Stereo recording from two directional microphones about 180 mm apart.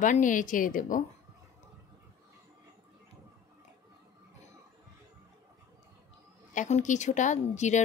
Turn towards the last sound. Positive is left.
turn(degrees=40)  # may be behind; listen again after turning